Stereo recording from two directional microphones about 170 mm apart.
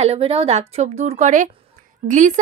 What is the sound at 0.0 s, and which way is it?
A woman's voice, 35° right (ahead or behind).